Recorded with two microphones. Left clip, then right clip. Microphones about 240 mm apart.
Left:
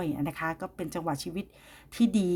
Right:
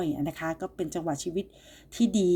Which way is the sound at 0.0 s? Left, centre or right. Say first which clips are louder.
Right 1 dB; left.